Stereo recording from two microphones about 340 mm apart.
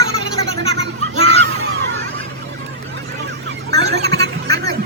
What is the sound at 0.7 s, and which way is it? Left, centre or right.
Children playing, centre.